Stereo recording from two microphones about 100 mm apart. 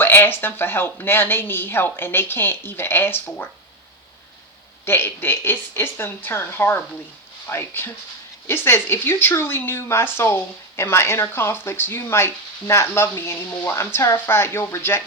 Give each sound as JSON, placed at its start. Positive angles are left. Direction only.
{"t": 0.0, "sound": "speech", "side_deg": 25}
{"t": 4.9, "sound": "speech", "side_deg": 25}